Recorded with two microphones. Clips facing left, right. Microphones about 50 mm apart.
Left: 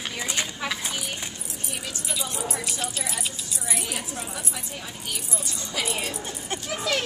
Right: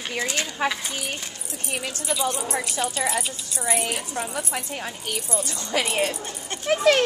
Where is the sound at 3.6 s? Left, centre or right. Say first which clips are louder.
Right 8 dB; right.